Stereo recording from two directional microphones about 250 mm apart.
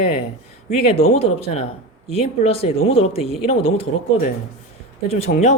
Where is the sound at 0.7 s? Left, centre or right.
Left.